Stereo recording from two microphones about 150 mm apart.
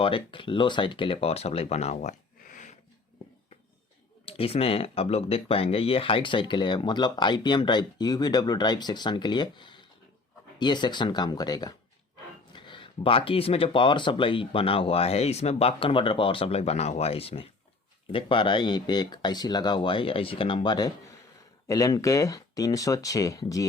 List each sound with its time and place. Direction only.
0.0 s speech: 35° left (ahead or behind); by 2.7 s 55° left (ahead or behind)
4.3 s speech: 40° left (ahead or behind); by 23.6 s 20° left (ahead or behind)